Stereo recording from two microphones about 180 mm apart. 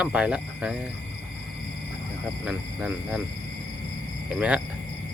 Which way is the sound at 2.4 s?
Centre (ahead or behind).